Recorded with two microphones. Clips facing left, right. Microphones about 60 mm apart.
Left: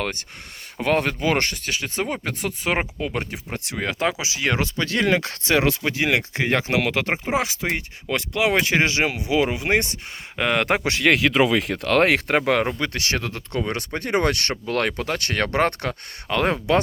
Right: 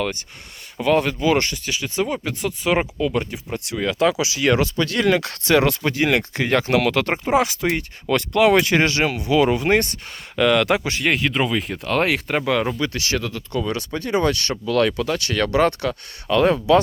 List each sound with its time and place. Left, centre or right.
0.0 s speech: left
3.9 s speech: left
10.3 s speech: left
10.8 s speech: left
12.5 s speech: left
14.7 s speech: left